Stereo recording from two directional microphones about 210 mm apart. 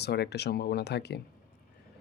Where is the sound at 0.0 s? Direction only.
50° left (ahead or behind).